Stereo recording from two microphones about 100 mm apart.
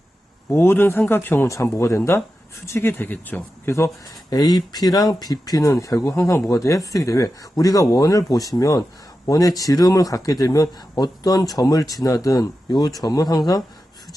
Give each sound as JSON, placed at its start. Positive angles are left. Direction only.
{"t": 0.5, "sound": "speech", "side_deg": 25}
{"t": 3.8, "sound": "speech", "side_deg": 30}
{"t": 4.4, "sound": "speech", "side_deg": 40}